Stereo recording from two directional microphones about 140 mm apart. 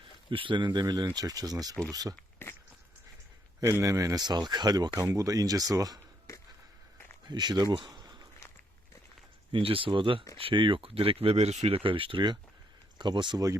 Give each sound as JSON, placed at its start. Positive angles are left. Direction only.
{"t": 0.3, "sound": "speech", "side_deg": -35}
{"t": 2.1, "sound": "a sound", "side_deg": 15}
{"t": 3.6, "sound": "speech", "side_deg": -20}
{"t": 7.3, "sound": "speech", "side_deg": -30}
{"t": 9.5, "sound": "speech", "side_deg": -40}